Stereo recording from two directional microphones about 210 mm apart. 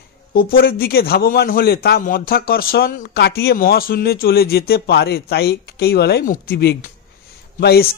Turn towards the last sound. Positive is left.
turn(degrees=50)  # may be behind; listen again after turning